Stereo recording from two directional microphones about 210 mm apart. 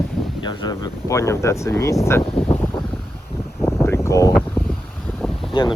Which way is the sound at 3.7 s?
15° left (ahead or behind).